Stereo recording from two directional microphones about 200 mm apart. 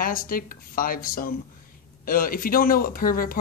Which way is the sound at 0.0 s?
45° left (ahead or behind).